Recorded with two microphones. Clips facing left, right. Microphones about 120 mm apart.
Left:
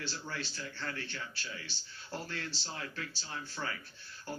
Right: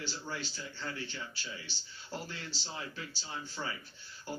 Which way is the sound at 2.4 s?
15° right (ahead or behind).